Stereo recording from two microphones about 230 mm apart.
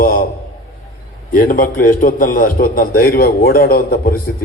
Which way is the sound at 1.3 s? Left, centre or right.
Left.